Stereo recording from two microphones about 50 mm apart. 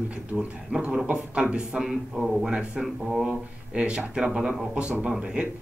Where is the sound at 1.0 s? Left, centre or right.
Right.